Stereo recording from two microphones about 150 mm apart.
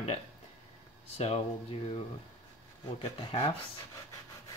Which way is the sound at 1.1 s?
45° left (ahead or behind).